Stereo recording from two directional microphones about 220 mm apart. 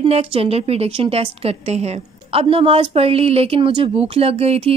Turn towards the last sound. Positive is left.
turn(degrees=-25)  # may be behind; listen again after turning